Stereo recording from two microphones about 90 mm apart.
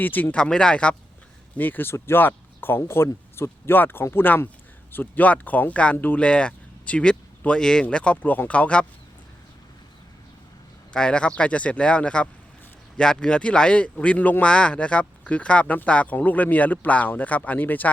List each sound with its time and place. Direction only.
0.0 s speech: 20° left (ahead or behind)
0.3 s speech: 10° left (ahead or behind)
10.9 s speech: 10° left (ahead or behind)